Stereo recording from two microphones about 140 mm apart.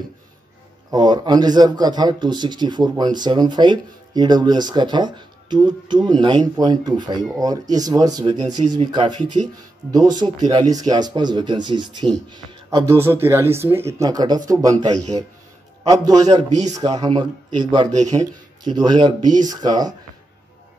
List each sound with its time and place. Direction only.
0.9 s speech: 30° right (ahead or behind)
12.6 s speech: 20° right (ahead or behind)